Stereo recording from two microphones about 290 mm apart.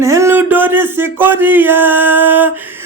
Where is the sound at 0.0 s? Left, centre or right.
Centre.